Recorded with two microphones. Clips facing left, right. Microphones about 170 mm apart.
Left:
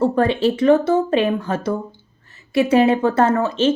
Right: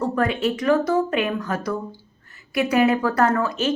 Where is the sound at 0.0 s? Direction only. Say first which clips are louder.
Left 5 dB; 30° left (ahead or behind).